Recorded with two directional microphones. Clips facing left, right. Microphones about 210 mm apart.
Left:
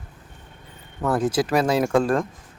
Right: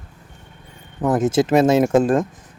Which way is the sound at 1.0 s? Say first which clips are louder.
Right 4 dB; 20° right (ahead or behind).